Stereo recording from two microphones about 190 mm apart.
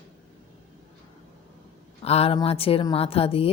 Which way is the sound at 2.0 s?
30° left (ahead or behind).